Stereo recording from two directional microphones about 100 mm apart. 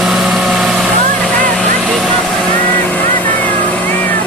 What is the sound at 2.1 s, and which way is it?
Vehicle, 10° left (ahead or behind).